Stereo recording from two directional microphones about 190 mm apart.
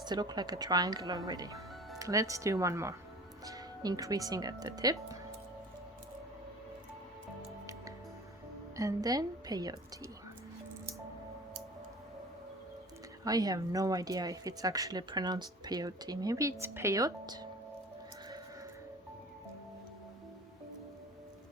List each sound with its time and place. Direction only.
0.0 s speech: 20° right (ahead or behind)
8.7 s a woman's voice: 15° right (ahead or behind)
13.2 s speech: 20° right (ahead or behind)